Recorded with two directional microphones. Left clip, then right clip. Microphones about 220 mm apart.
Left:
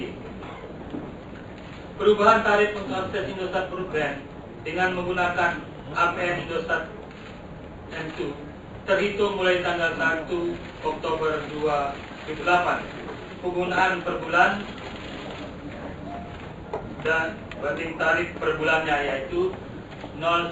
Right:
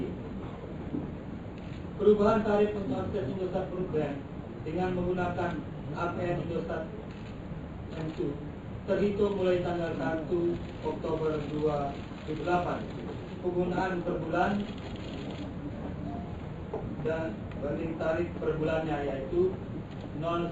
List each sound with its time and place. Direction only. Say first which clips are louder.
2.0 s a man's voice: left 6 dB; 20° left (ahead or behind)
8.2 s a man's voice: left 3 dB; 20° left (ahead or behind)
17.0 s a man's voice: left 10 dB; 20° left (ahead or behind)